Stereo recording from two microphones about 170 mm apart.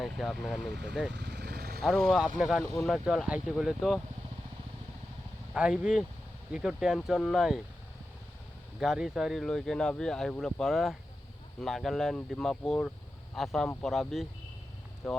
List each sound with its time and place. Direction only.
0.0 s speech: centre (ahead or behind)
0.7 s speech: 90° right
1.1 s vehicle: 80° right
1.8 s speech: centre (ahead or behind)
5.5 s speech: 5° right (ahead or behind)
8.8 s speech: centre (ahead or behind)